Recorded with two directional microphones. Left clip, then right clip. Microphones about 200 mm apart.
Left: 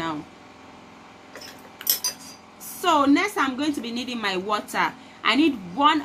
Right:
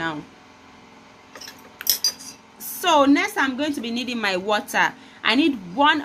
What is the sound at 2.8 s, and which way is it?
Speech, 40° right (ahead or behind).